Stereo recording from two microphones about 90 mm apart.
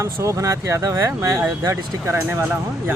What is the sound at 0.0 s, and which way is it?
Speech, 35° right (ahead or behind).